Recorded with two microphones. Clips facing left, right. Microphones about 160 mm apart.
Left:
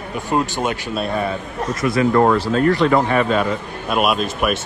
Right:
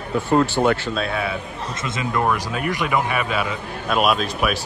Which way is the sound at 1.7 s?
20° right (ahead or behind).